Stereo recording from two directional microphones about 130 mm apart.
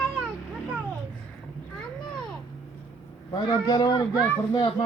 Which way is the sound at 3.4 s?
30° left (ahead or behind).